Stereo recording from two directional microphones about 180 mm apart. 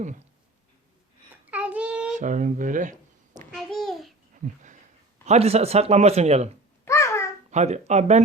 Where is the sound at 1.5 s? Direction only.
5° right (ahead or behind).